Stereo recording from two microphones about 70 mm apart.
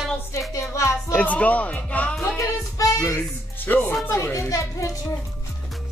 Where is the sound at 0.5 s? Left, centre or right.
Left.